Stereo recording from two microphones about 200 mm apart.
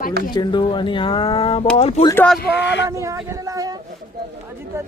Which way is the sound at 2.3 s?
60° left (ahead or behind).